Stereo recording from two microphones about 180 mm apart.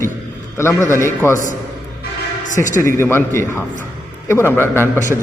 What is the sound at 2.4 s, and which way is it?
Speech, 45° left (ahead or behind).